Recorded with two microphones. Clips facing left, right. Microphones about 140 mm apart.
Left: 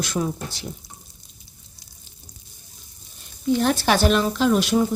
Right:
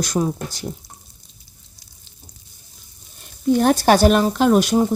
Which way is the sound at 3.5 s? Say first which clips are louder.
Right 5 dB; 45° right (ahead or behind).